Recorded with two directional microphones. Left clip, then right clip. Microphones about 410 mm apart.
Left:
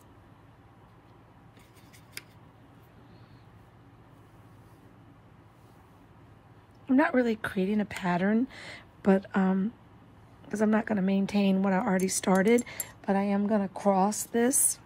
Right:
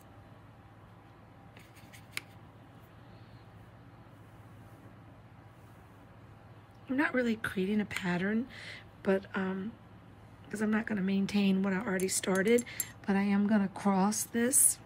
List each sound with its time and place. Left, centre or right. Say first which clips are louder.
6.9 s a woman's voice: left 6 dB; centre